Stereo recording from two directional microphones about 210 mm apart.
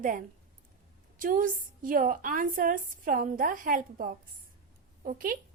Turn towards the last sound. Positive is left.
turn(degrees=-40)  # may be behind; listen again after turning